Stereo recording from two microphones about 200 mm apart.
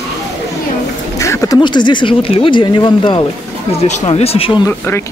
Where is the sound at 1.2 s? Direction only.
15° left (ahead or behind).